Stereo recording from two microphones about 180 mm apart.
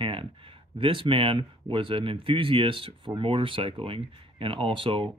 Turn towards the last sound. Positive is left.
turn(degrees=-30)  # may be behind; listen again after turning